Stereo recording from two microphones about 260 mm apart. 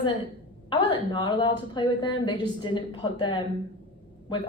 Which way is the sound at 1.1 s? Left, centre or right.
Centre.